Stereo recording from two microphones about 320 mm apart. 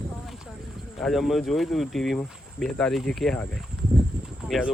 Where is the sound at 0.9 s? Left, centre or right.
Centre.